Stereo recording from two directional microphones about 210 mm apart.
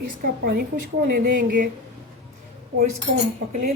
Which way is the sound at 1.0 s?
45° right (ahead or behind).